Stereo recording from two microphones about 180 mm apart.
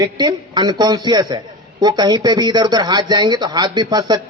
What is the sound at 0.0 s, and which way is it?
Speech, 25° right (ahead or behind).